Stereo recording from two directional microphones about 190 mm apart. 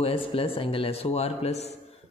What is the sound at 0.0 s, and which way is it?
Speech, 30° left (ahead or behind).